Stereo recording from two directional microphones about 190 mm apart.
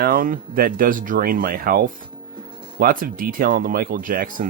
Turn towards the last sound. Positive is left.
turn(degrees=-50)  # may be behind; listen again after turning